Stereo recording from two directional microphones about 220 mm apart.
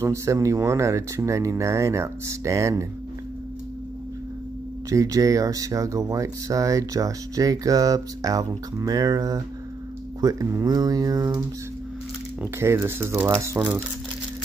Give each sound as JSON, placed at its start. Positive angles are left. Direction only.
{"t": 0.0, "sound": "speech", "side_deg": -15}
{"t": 4.8, "sound": "speech", "side_deg": -15}